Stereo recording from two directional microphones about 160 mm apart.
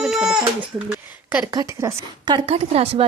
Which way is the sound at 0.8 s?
10° right (ahead or behind).